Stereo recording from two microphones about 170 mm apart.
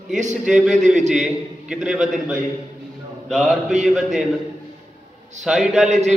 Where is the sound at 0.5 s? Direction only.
5° right (ahead or behind).